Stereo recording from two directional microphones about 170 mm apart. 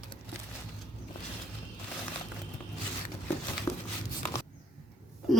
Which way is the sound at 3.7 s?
20° left (ahead or behind).